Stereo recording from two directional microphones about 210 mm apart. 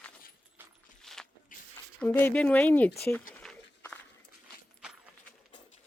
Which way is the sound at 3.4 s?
5° left (ahead or behind).